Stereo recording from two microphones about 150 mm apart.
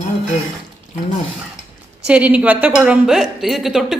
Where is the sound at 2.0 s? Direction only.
10° right (ahead or behind).